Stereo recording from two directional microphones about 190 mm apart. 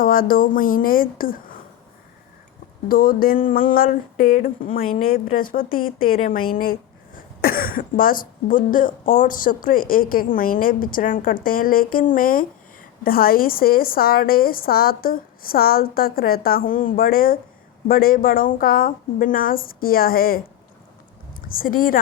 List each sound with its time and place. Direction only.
0.0 s a woman's voice: 45° left (ahead or behind)
2.9 s a woman's voice: 50° left (ahead or behind)
21.4 s a woman's voice: 50° left (ahead or behind)